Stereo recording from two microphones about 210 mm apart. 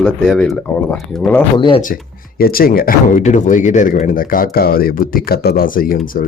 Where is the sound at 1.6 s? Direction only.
20° left (ahead or behind).